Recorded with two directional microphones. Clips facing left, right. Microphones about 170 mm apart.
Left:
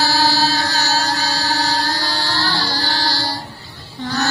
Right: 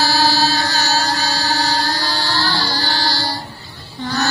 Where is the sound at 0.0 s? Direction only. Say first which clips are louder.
Right 1 dB; 50° left (ahead or behind).